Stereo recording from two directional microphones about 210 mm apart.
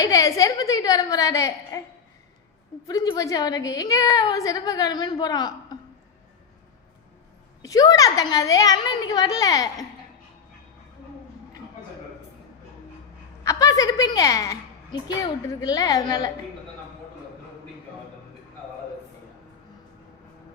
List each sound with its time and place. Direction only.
0.0 s a woman's voice: 15° left (ahead or behind)
2.8 s a woman's voice: 15° left (ahead or behind)
7.6 s a woman's voice: 15° left (ahead or behind)
13.4 s a woman's voice: 15° left (ahead or behind)